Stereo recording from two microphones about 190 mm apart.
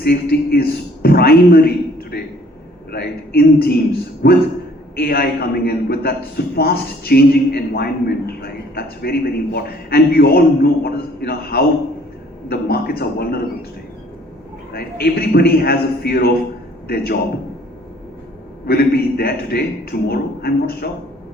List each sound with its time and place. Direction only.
0.0 s a man's voice: 55° left (ahead or behind)
14.7 s a man's voice: 55° left (ahead or behind)
18.6 s a man's voice: 55° left (ahead or behind)